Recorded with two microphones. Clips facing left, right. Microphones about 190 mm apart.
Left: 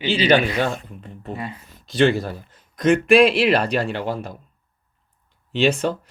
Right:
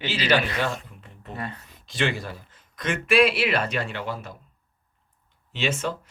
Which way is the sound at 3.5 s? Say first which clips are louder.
Left 7 dB; 35° left (ahead or behind).